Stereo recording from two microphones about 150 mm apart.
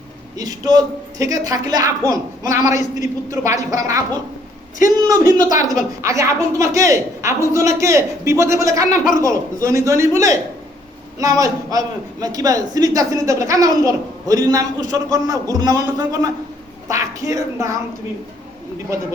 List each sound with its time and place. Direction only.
0.3 s a woman's voice: 25° right (ahead or behind)
2.6 s a man's voice: 55° left (ahead or behind)
3.2 s a woman's voice: 20° right (ahead or behind)
5.4 s a woman's voice: 60° left (ahead or behind)
5.6 s a woman's voice: 20° right (ahead or behind)